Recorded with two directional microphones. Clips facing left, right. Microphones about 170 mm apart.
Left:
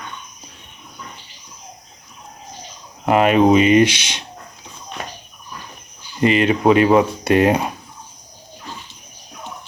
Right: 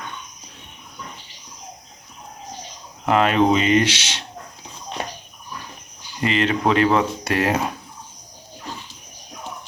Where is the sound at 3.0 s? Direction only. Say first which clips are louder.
Left 4 dB; 15° left (ahead or behind).